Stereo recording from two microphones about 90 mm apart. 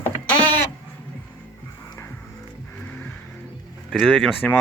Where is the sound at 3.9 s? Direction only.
Centre (ahead or behind).